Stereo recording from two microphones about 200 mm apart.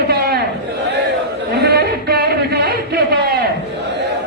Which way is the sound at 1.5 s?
55° right (ahead or behind).